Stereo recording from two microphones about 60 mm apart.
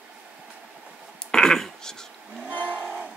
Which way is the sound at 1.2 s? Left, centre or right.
Centre.